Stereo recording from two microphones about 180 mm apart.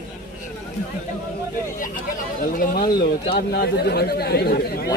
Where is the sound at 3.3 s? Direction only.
60° left (ahead or behind).